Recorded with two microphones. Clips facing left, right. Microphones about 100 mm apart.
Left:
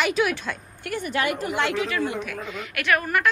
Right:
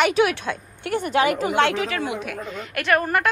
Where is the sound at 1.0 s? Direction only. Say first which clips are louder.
Right 5 dB; 90° right.